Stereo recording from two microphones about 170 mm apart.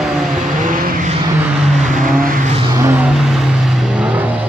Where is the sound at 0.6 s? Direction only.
55° right (ahead or behind).